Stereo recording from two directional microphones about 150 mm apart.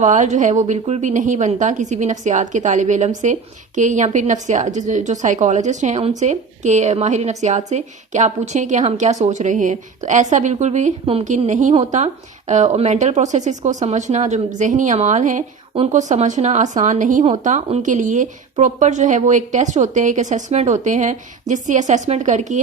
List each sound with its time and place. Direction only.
0.0 s a woman's voice: 55° right (ahead or behind)